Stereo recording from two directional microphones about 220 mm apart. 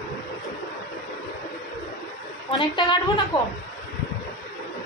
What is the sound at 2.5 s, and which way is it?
Speech, 20° left (ahead or behind).